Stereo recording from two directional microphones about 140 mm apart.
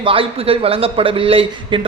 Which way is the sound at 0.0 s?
40° right (ahead or behind).